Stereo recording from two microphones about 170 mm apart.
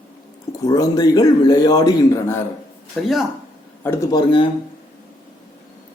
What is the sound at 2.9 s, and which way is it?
Speech, centre (ahead or behind).